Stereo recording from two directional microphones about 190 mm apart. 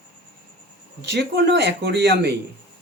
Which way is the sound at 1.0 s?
65° right (ahead or behind).